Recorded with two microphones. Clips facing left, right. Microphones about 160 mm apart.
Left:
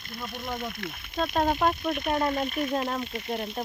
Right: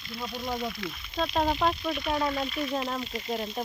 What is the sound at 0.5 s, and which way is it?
Speech, 55° left (ahead or behind).